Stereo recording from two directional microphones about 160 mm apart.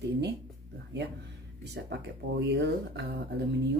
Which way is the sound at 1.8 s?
90° right.